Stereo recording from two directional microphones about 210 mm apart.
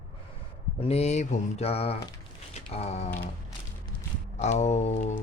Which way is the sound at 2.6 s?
30° left (ahead or behind).